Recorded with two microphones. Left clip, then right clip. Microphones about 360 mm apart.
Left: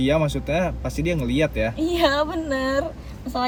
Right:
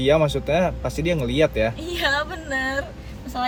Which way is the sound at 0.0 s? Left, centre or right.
Centre.